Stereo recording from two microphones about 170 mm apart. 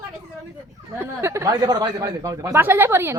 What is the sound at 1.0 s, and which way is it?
Speech, 15° right (ahead or behind).